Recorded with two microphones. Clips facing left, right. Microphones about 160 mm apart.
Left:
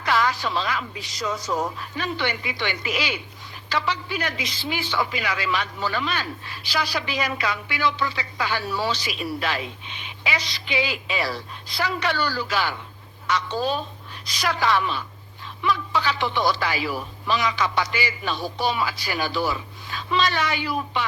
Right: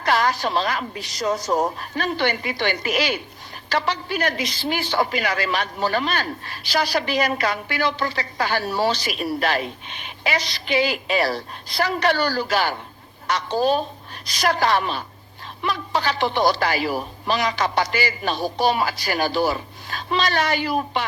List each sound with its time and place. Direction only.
0.0 s a man's voice: 40° right (ahead or behind)